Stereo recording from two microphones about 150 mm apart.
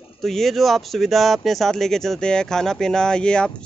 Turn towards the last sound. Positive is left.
turn(degrees=5)  # may be behind; listen again after turning